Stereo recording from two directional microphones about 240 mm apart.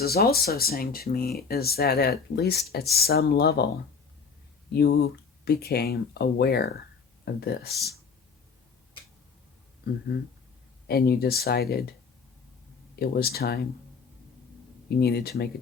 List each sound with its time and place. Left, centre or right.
0.0 s speech: left
4.7 s speech: left
10.8 s speech: left
13.0 s speech: left
14.8 s speech: left